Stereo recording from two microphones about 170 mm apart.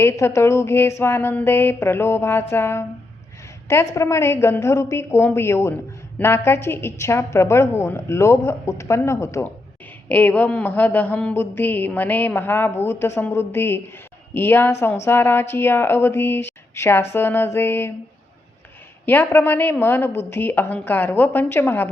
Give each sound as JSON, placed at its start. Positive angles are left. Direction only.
{"t": 0.0, "sound": "a woman's voice", "side_deg": 15}
{"t": 19.0, "sound": "a woman's voice", "side_deg": 10}